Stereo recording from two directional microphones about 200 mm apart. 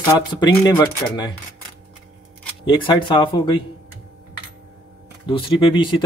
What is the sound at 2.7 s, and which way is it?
Speech, 25° left (ahead or behind).